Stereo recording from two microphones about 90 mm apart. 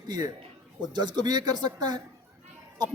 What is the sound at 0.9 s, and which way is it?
Speech, 55° right (ahead or behind).